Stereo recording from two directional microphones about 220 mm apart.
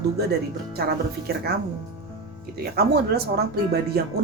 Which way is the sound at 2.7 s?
45° right (ahead or behind).